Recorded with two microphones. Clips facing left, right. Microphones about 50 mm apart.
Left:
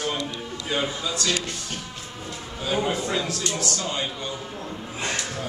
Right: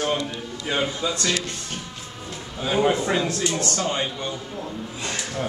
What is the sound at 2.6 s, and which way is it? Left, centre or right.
A man's voice, right.